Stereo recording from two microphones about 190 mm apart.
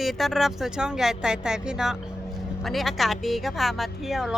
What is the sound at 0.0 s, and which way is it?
Speech, centre (ahead or behind).